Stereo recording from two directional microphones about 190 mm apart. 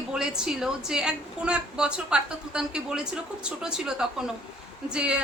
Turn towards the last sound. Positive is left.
turn(degrees=-5)  # may be behind; listen again after turning